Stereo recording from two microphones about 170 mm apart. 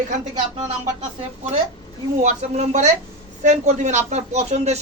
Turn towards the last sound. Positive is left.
turn(degrees=-40)  # may be behind; listen again after turning